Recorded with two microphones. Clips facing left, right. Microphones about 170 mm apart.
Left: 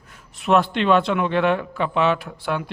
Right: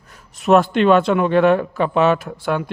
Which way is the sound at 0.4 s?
45° right (ahead or behind).